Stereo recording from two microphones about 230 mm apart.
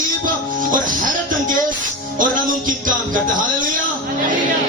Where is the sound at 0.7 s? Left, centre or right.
Right.